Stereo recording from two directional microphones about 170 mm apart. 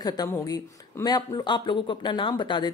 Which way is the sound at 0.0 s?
25° left (ahead or behind).